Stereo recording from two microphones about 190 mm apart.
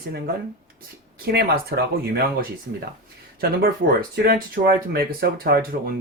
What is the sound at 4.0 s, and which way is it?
Speech, 50° right (ahead or behind).